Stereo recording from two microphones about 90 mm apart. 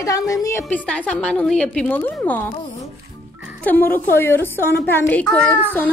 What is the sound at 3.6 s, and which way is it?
A woman's voice, 20° left (ahead or behind).